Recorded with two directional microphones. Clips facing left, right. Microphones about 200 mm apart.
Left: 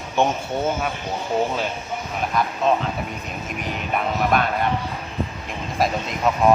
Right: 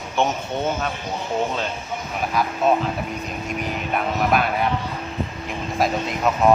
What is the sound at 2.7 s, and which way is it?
Speech, 5° right (ahead or behind).